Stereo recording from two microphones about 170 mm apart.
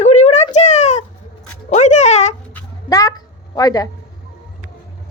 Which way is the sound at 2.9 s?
20° left (ahead or behind).